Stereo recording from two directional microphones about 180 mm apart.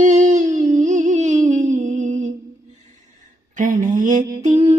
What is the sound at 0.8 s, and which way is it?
Music, 45° right (ahead or behind).